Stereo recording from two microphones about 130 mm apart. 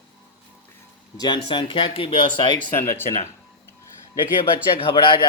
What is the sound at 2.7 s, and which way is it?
Speech, 20° left (ahead or behind).